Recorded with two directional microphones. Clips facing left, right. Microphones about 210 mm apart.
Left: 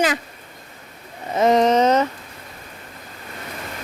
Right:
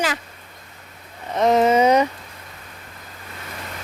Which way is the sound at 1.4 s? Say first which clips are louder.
Even; centre (ahead or behind).